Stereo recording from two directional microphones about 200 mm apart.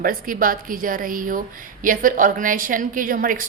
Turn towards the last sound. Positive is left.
turn(degrees=-45)  # may be behind; listen again after turning